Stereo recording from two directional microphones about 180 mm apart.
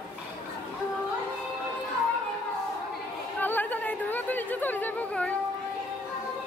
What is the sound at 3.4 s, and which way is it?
Chatter, 10° left (ahead or behind).